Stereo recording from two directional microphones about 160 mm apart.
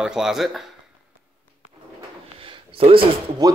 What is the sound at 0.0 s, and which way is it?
Speech, 5° right (ahead or behind).